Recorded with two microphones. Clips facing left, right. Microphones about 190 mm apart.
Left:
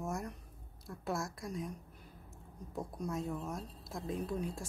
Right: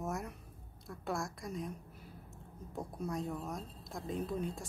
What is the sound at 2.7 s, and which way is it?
A woman's voice, centre (ahead or behind).